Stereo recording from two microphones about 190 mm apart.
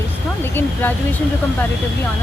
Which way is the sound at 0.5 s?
10° left (ahead or behind).